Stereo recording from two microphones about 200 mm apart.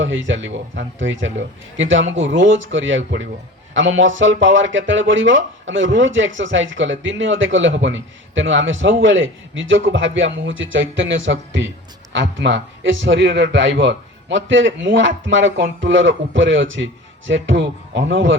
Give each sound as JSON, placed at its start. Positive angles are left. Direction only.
{"t": 0.0, "sound": "speech", "side_deg": -70}